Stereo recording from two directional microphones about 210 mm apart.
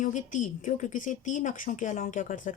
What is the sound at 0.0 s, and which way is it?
A woman's voice, 40° left (ahead or behind).